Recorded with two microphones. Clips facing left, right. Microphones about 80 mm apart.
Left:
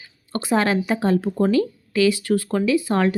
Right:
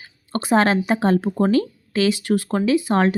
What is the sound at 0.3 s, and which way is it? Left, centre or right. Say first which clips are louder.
Speech: right 3 dB; right.